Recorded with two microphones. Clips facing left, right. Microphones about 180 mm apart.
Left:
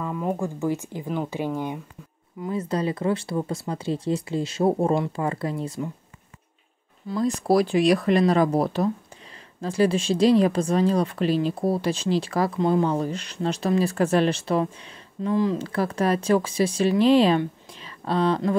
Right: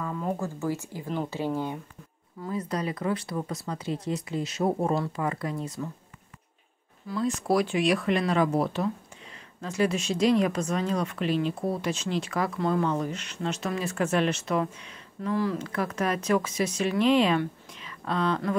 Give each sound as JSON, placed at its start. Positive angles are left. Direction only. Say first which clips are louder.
{"t": 0.0, "sound": "speech", "louder": "left 4 dB", "side_deg": 10}
{"t": 2.4, "sound": "speech", "louder": "left 5 dB", "side_deg": 25}
{"t": 7.2, "sound": "speech", "louder": "left 4 dB", "side_deg": 35}